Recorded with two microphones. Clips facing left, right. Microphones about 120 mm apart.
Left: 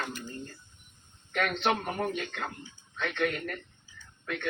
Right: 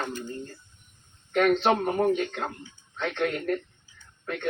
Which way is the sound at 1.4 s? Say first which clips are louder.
Right 7 dB; 30° right (ahead or behind).